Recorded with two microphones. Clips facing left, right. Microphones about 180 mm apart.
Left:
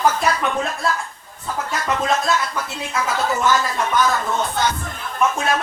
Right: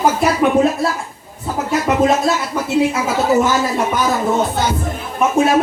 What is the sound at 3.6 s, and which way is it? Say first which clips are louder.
Speech: right 3 dB; 10° right (ahead or behind).